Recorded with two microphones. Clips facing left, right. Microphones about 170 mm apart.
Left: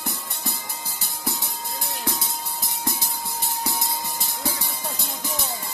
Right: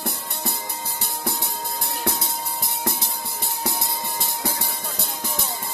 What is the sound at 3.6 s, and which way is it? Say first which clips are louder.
Music: right 3 dB; 60° right (ahead or behind).